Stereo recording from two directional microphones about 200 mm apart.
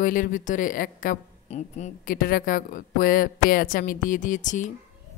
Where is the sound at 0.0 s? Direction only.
40° left (ahead or behind).